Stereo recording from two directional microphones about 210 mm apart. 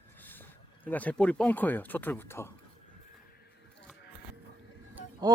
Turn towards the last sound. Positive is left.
turn(degrees=-20)  # may be behind; listen again after turning